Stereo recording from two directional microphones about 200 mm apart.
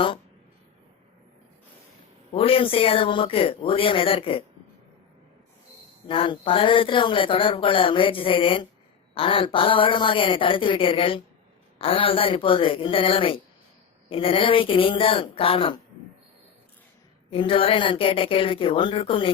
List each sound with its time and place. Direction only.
2.3 s a woman's voice: 30° left (ahead or behind)
6.1 s a woman's voice: 25° left (ahead or behind)
17.3 s a woman's voice: 25° left (ahead or behind)